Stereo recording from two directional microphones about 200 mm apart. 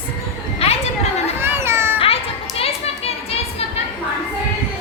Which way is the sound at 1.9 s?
30° left (ahead or behind).